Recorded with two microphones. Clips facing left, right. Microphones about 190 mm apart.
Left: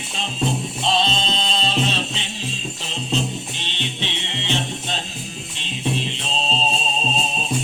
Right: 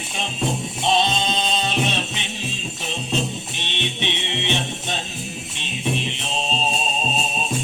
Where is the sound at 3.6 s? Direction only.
20° right (ahead or behind).